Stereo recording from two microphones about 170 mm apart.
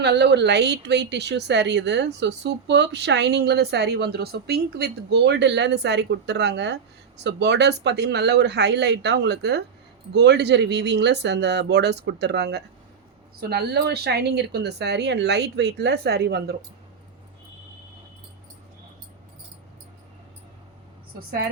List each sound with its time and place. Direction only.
0.0 s speech: 85° right
13.4 s speech: 70° right (ahead or behind)